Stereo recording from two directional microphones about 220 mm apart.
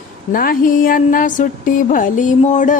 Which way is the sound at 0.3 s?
40° left (ahead or behind).